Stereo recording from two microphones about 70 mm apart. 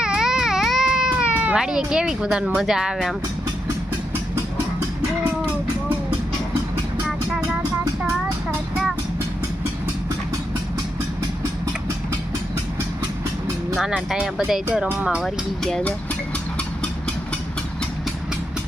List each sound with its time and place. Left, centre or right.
0.0 s baby cry: centre
1.1 s cat: centre
1.5 s speech: centre
13.8 s speech: centre
15.2 s speech: centre